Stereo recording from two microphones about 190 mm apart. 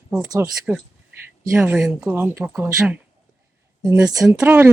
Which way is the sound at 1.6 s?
Centre (ahead or behind).